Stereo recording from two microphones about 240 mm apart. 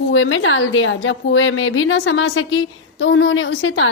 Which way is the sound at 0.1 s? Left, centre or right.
Left.